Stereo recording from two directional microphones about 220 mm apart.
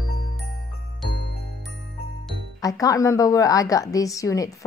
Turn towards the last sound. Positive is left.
turn(degrees=15)  # may be behind; listen again after turning